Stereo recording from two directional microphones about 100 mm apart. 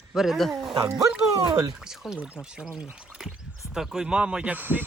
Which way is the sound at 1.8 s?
5° right (ahead or behind).